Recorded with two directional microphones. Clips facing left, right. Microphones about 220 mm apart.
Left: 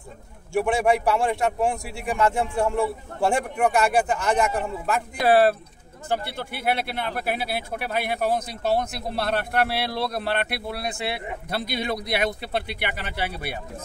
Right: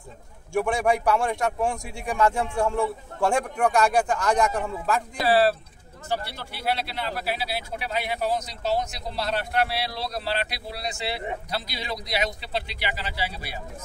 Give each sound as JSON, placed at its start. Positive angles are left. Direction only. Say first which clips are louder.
{"t": 0.5, "sound": "a man's voice", "louder": "left 2 dB", "side_deg": 5}
{"t": 5.2, "sound": "speech", "louder": "left 3 dB", "side_deg": 55}